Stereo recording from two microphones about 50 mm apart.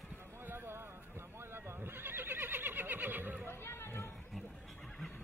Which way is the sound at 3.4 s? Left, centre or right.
Left.